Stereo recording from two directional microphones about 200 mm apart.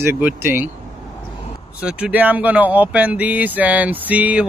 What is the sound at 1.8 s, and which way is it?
Speech, 5° right (ahead or behind).